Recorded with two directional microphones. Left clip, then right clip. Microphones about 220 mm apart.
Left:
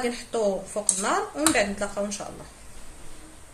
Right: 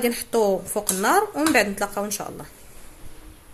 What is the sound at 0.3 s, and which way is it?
Speech, 50° right (ahead or behind).